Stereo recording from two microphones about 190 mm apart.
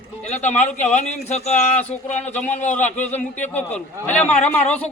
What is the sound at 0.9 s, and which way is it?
Speech, 35° left (ahead or behind).